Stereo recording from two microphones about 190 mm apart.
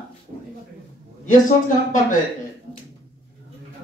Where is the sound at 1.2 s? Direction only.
40° left (ahead or behind).